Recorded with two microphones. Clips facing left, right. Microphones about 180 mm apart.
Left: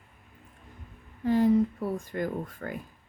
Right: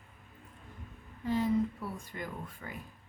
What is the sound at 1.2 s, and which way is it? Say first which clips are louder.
A woman's voice: left 7 dB; 50° left (ahead or behind).